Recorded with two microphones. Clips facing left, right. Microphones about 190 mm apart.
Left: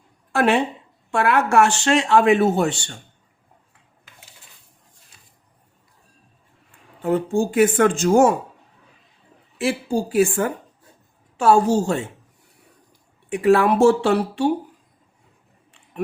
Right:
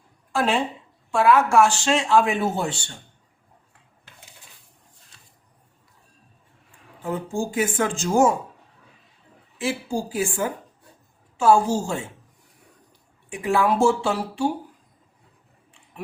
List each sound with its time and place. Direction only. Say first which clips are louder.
0.3 s speech: left 4 dB; 65° left (ahead or behind)
7.0 s speech: left 7 dB; 65° left (ahead or behind)
9.6 s speech: left 4 dB; 65° left (ahead or behind)
13.3 s speech: left 5 dB; 65° left (ahead or behind)